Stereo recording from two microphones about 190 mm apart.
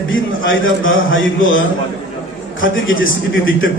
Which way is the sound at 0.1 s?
90° left.